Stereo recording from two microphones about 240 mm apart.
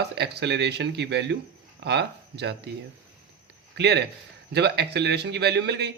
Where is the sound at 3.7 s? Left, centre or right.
Right.